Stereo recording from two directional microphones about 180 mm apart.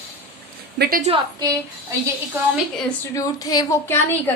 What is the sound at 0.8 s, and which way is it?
Speech, 55° right (ahead or behind).